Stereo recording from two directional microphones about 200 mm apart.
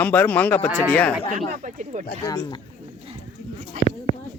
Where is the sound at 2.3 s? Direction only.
20° left (ahead or behind).